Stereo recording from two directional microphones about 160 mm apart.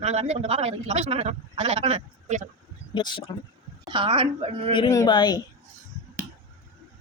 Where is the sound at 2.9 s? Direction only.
30° left (ahead or behind).